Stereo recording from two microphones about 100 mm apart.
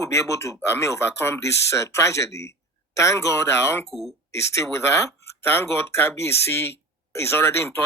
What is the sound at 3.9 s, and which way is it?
Speech, centre (ahead or behind).